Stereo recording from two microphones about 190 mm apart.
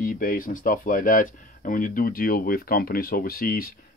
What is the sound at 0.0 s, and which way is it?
Speech, 45° left (ahead or behind).